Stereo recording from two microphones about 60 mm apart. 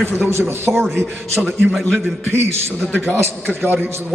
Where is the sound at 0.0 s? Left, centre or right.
Right.